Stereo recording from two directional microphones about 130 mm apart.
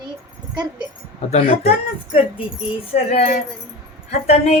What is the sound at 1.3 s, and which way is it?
Speech, 45° left (ahead or behind).